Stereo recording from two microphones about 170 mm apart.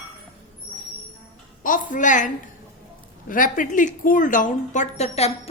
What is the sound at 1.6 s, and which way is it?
Speech, 50° left (ahead or behind).